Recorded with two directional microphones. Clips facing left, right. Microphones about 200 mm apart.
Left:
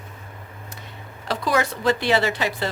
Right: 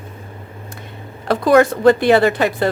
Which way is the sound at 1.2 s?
55° right (ahead or behind).